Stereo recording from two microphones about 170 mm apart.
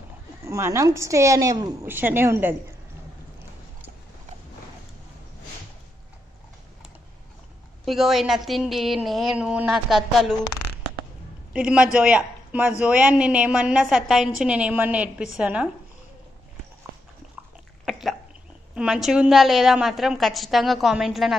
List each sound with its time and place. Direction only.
0.5 s a man's voice: 15° right (ahead or behind)
7.8 s a woman's voice: centre (ahead or behind)
11.5 s a man's voice: 5° right (ahead or behind)
18.8 s a woman's voice: 5° right (ahead or behind)